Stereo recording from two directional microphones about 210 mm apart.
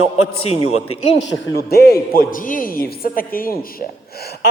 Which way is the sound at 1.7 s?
45° left (ahead or behind).